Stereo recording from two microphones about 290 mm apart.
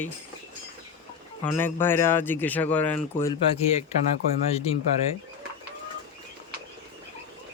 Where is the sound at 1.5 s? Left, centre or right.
Centre.